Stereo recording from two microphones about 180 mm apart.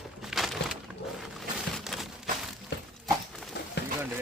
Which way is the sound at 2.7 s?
70° left (ahead or behind).